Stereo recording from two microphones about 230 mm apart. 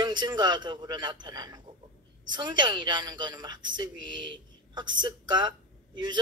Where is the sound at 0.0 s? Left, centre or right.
Centre.